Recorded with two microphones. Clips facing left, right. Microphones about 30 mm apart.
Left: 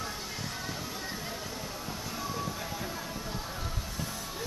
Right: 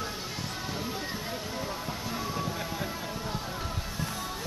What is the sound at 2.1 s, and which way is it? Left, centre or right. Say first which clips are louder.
Music: right 2 dB; centre.